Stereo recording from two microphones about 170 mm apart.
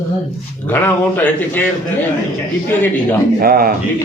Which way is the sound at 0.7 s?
10° left (ahead or behind).